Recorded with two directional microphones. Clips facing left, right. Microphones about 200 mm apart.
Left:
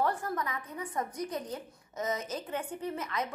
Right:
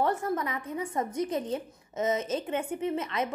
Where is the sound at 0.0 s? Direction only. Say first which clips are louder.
Right 4 dB; 25° right (ahead or behind).